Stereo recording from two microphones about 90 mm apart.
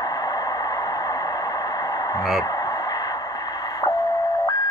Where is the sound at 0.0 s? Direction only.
45° left (ahead or behind).